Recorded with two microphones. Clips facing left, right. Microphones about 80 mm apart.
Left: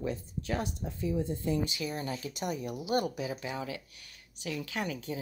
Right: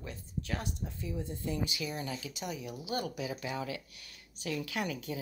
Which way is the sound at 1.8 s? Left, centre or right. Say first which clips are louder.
Left 3 dB; left.